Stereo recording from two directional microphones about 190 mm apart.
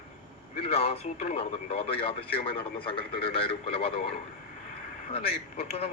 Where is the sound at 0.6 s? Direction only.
30° left (ahead or behind).